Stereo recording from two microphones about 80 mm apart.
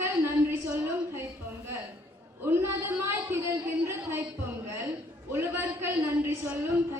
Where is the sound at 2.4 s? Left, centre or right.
Right.